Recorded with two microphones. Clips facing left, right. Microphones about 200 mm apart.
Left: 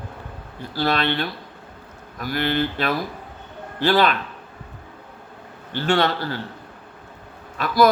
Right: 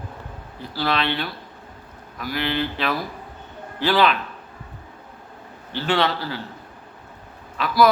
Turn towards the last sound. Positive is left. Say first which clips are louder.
# left 1 dB
turn(degrees=45)  # may be behind; listen again after turning